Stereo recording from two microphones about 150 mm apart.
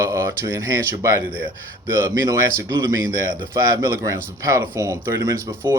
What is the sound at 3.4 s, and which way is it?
Speech, 20° right (ahead or behind).